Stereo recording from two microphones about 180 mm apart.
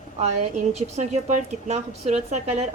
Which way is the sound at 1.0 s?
40° right (ahead or behind).